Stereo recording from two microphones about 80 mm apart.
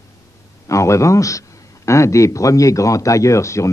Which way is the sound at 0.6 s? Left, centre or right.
Left.